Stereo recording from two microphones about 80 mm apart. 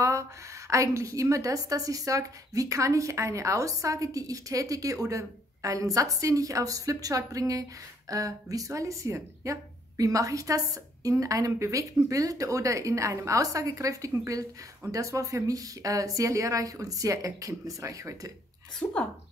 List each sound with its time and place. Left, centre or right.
0.7 s a woman's voice: right
18.8 s speech: left